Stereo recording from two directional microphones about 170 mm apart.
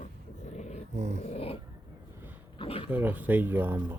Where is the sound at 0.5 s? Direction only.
40° left (ahead or behind).